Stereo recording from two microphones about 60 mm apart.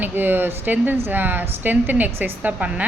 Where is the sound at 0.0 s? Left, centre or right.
Right.